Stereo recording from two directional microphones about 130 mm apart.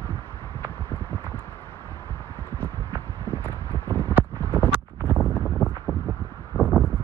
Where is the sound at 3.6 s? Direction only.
20° left (ahead or behind).